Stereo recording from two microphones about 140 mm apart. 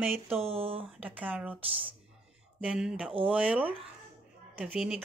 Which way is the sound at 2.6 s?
5° right (ahead or behind).